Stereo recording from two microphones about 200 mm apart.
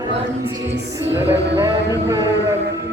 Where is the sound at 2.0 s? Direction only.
15° right (ahead or behind).